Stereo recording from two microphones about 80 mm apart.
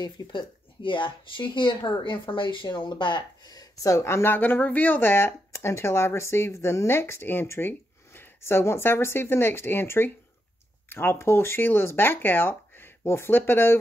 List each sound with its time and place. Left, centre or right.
0.0 s speech: left
3.4 s speech: left